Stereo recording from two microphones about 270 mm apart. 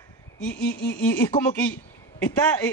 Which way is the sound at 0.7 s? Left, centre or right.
Left.